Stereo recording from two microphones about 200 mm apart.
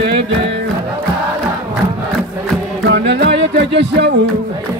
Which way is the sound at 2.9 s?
60° right (ahead or behind).